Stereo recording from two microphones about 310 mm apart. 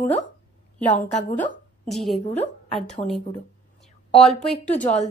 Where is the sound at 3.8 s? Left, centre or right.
Centre.